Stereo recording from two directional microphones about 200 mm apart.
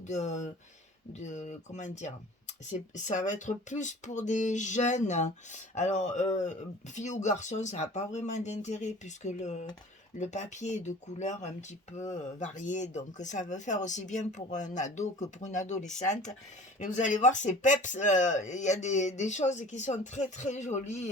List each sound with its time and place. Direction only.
0.1 s speech: 35° left (ahead or behind)